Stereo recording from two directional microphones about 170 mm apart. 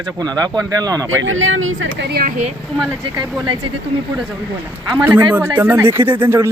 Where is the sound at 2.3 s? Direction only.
45° right (ahead or behind).